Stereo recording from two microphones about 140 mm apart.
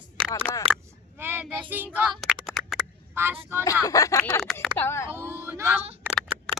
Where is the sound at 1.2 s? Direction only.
15° right (ahead or behind).